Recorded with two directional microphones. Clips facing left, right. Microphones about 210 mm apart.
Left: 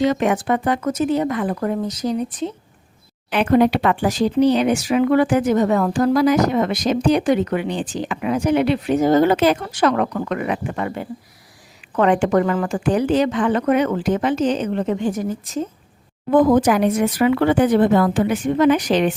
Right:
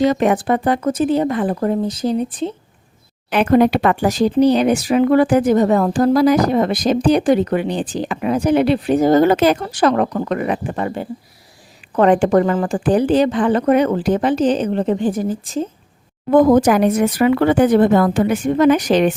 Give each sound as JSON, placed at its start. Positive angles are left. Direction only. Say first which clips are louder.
{"t": 0.0, "sound": "speech", "louder": "right 3 dB", "side_deg": -35}
{"t": 3.2, "sound": "speech", "louder": "right 2 dB", "side_deg": -45}
{"t": 16.3, "sound": "speech", "louder": "right 3 dB", "side_deg": -40}